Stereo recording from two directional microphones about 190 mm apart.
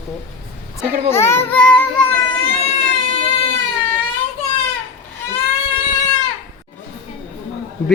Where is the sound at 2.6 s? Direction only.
30° left (ahead or behind).